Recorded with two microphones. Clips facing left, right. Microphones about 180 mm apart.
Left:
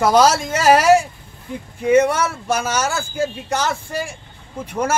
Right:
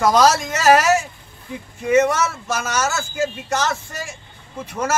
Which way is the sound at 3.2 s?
10° left (ahead or behind).